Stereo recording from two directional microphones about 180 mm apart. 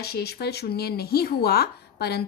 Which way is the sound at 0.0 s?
60° left (ahead or behind).